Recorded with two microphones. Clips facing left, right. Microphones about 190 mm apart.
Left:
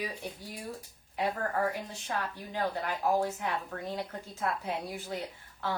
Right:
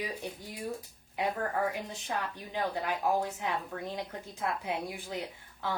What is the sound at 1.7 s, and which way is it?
Speech, 15° right (ahead or behind).